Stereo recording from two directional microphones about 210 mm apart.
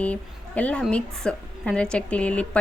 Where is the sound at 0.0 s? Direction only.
5° left (ahead or behind).